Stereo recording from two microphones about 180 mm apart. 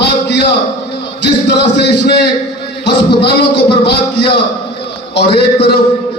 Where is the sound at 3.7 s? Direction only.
25° left (ahead or behind).